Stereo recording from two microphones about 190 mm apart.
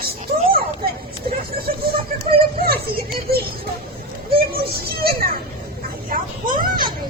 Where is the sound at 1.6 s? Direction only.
55° right (ahead or behind).